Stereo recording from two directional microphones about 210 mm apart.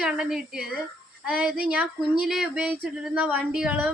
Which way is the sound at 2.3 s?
Centre (ahead or behind).